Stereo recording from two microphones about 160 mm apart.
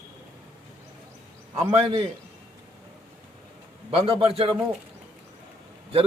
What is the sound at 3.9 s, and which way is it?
Speech, 35° right (ahead or behind).